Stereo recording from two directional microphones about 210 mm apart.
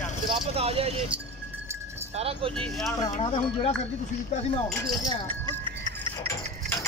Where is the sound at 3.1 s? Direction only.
25° left (ahead or behind).